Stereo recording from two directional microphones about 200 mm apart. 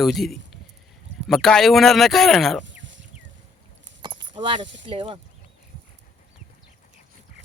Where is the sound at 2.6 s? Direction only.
65° right (ahead or behind).